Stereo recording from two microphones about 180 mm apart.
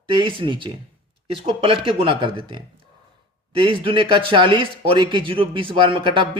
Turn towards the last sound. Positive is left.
turn(degrees=-25)  # may be behind; listen again after turning